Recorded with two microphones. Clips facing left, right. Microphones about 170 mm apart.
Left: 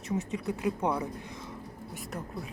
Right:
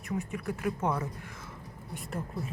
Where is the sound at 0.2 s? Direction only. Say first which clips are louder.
Left 2 dB; 20° left (ahead or behind).